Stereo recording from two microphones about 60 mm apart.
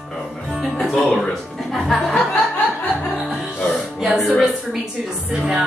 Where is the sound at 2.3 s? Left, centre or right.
Left.